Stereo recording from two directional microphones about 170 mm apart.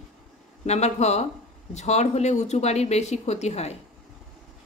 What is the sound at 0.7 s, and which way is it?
Speech, 40° left (ahead or behind).